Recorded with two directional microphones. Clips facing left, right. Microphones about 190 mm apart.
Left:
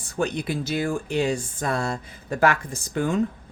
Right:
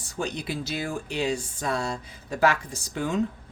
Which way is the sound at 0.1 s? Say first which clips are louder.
Left 5 dB; 55° left (ahead or behind).